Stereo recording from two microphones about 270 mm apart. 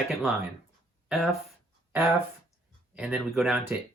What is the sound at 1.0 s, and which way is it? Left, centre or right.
Speech, centre.